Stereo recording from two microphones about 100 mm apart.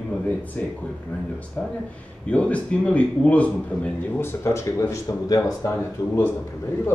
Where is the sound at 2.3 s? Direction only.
15° left (ahead or behind).